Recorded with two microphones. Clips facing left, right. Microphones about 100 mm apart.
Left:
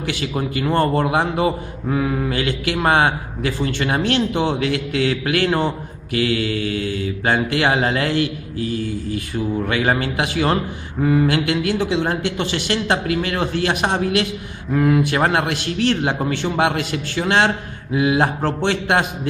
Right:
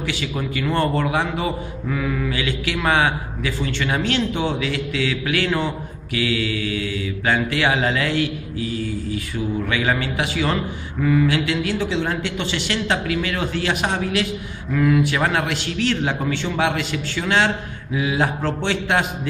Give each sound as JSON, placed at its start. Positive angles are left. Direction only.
{"t": 0.7, "sound": "a man's voice", "side_deg": 40}
{"t": 2.8, "sound": "mantra", "side_deg": 45}
{"t": 14.7, "sound": "a man's voice", "side_deg": 40}
{"t": 15.0, "sound": "mantra", "side_deg": 45}